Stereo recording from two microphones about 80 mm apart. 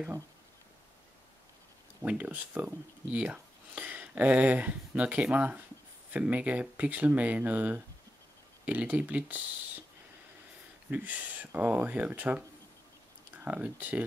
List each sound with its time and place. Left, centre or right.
2.0 s speech: centre
10.9 s speech: centre